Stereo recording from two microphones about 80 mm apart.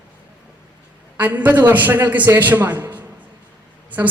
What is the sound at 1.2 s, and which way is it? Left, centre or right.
A man's voice, right.